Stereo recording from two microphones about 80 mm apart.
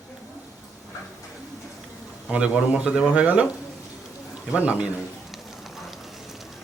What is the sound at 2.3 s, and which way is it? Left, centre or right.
Speech, centre.